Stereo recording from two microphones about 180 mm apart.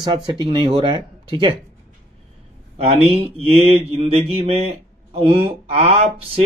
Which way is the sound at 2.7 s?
35° right (ahead or behind).